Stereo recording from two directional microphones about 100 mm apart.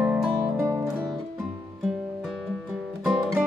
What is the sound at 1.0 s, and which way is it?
Music, centre (ahead or behind).